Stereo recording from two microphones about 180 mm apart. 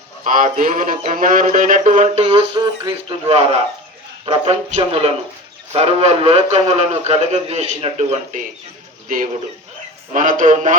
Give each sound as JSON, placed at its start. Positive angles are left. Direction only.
{"t": 0.3, "sound": "a man's voice", "side_deg": -45}
{"t": 9.0, "sound": "speech", "side_deg": -50}